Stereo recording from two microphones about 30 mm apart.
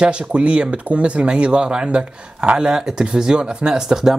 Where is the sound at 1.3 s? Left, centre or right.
Right.